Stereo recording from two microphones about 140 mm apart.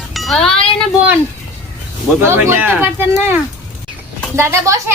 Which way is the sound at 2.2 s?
15° right (ahead or behind).